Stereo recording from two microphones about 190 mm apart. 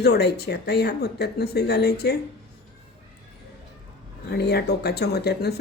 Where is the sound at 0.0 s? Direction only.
60° left (ahead or behind).